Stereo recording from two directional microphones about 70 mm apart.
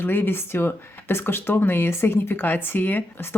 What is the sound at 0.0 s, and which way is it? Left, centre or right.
Speech, left.